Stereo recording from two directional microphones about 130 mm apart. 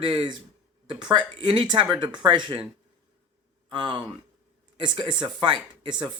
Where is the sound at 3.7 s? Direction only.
40° right (ahead or behind).